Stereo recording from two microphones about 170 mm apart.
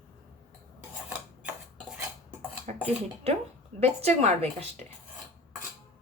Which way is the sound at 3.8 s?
40° right (ahead or behind).